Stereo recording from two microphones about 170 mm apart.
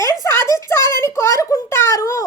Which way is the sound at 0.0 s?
15° left (ahead or behind).